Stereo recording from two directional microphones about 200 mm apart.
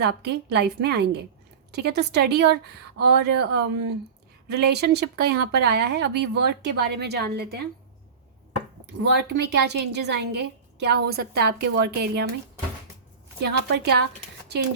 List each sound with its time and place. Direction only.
0.0 s speech: 55° right (ahead or behind)
9.2 s speech: 55° right (ahead or behind)
13.4 s speech: 55° right (ahead or behind)